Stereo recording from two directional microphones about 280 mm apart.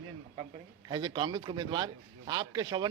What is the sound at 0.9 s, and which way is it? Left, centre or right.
Speech, centre.